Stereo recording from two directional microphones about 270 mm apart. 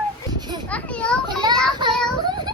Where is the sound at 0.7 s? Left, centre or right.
Centre.